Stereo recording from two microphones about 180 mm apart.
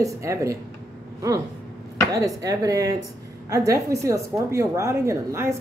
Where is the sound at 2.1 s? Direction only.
20° right (ahead or behind).